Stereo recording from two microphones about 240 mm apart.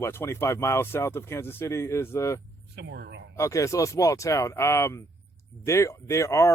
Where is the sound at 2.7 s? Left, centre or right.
Right.